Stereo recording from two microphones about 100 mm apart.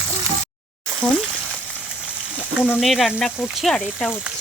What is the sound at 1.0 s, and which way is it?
Frying, 15° left (ahead or behind).